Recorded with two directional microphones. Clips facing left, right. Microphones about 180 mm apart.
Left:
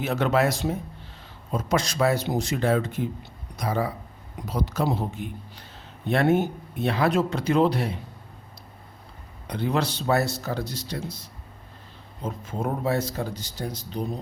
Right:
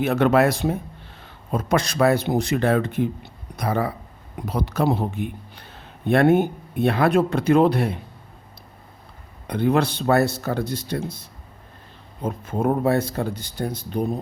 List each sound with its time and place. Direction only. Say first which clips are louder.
0.0 s speech: right 5 dB; 60° right (ahead or behind)
9.5 s speech: right 6 dB; 55° right (ahead or behind)